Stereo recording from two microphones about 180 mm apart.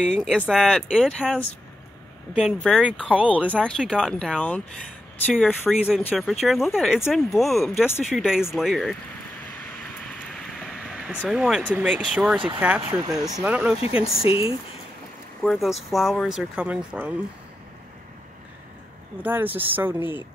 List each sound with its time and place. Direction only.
0.0 s speech: 5° left (ahead or behind)
10.6 s speech: centre (ahead or behind)
13.7 s speech: 35° left (ahead or behind)
15.4 s speech: centre (ahead or behind)
19.2 s speech: 10° right (ahead or behind)